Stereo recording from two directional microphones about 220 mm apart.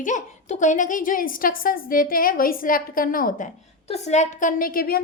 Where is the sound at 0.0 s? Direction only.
35° left (ahead or behind).